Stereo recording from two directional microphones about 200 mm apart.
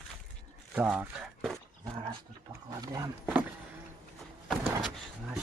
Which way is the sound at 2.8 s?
20° right (ahead or behind).